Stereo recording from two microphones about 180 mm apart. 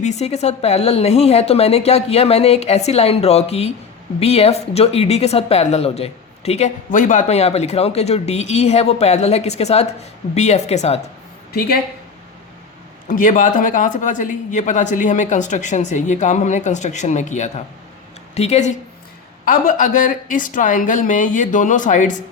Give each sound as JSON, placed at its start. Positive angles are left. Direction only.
{"t": 0.0, "sound": "speech", "side_deg": 40}
{"t": 13.1, "sound": "speech", "side_deg": 45}
{"t": 19.5, "sound": "speech", "side_deg": 50}